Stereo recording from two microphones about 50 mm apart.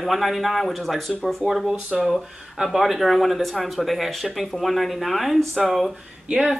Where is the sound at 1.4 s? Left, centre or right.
Centre.